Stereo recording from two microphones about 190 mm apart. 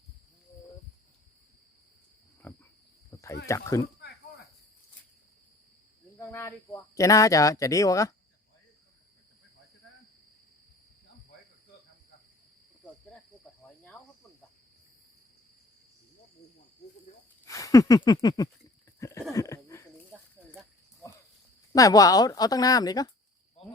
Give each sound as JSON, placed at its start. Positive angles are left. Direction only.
{"t": 2.4, "sound": "cricket", "side_deg": 10}
{"t": 3.4, "sound": "speech", "side_deg": 15}
{"t": 6.1, "sound": "cricket", "side_deg": 15}
{"t": 6.9, "sound": "speech", "side_deg": 15}
{"t": 13.6, "sound": "cricket", "side_deg": 10}
{"t": 17.4, "sound": "a sound", "side_deg": 15}
{"t": 21.7, "sound": "speech", "side_deg": 20}